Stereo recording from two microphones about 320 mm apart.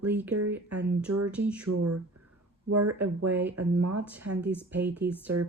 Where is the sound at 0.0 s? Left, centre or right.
Centre.